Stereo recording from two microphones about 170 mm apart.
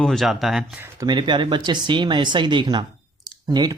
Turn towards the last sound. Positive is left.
turn(degrees=-25)  # may be behind; listen again after turning